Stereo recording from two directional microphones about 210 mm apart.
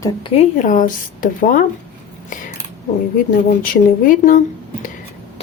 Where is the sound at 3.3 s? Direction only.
40° left (ahead or behind).